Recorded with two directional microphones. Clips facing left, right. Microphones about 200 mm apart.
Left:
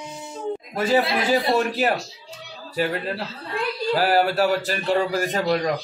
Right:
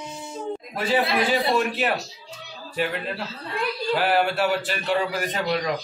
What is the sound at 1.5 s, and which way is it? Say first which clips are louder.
Speech: left 2 dB; 40° left (ahead or behind).